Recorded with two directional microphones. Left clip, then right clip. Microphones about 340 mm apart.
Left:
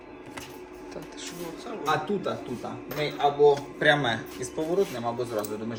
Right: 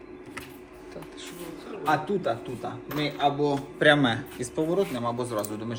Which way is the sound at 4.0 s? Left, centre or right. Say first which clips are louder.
Right 2 dB; right.